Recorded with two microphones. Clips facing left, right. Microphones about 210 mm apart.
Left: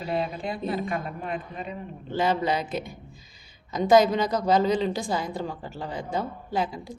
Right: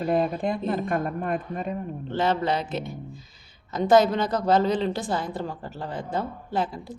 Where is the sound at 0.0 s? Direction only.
50° right (ahead or behind).